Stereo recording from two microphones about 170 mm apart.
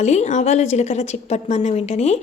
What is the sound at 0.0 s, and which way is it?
A woman's voice, 40° left (ahead or behind).